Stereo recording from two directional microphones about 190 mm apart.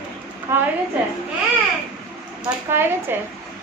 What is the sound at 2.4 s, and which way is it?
Speech, 10° right (ahead or behind).